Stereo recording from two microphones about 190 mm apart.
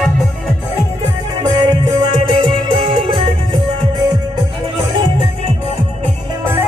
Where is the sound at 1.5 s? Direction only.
25° right (ahead or behind).